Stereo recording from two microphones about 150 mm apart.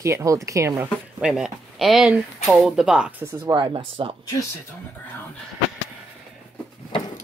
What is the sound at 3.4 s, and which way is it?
Speech, 30° right (ahead or behind).